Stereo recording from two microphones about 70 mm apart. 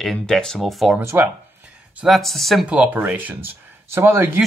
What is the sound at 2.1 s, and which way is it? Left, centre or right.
Speech, centre.